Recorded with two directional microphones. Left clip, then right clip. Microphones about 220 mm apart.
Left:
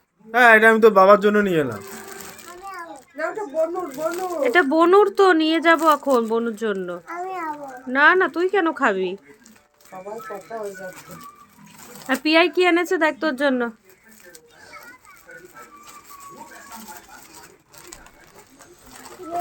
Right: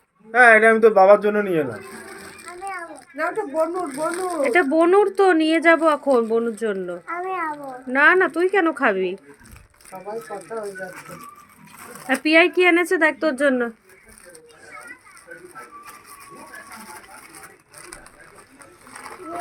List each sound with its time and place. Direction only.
0.3 s a man's voice: 50° left (ahead or behind)
3.2 s speech: 40° right (ahead or behind)
4.1 s speech: 10° left (ahead or behind)
12.0 s speech: 5° left (ahead or behind)